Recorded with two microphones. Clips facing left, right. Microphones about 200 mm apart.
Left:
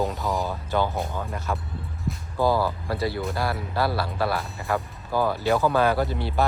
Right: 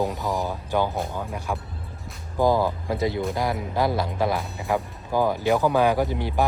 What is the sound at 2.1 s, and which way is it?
Speech, centre (ahead or behind).